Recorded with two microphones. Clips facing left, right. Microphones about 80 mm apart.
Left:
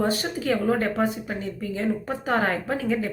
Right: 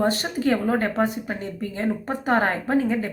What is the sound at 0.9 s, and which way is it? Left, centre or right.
Speech, right.